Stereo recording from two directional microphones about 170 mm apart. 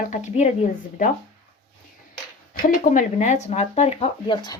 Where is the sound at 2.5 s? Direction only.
50° left (ahead or behind).